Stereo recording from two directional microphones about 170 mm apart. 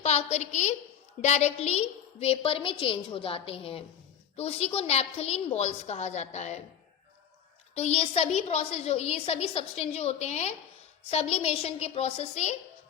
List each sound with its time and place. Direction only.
0.0 s a woman's voice: 40° left (ahead or behind)
7.8 s a woman's voice: 40° left (ahead or behind)